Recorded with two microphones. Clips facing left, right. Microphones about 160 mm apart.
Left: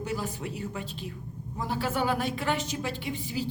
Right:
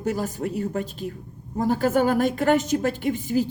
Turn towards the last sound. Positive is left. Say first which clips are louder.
# right 9 dB
turn(degrees=-45)  # may be behind; listen again after turning